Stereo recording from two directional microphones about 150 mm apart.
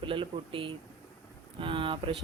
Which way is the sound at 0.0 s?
35° right (ahead or behind).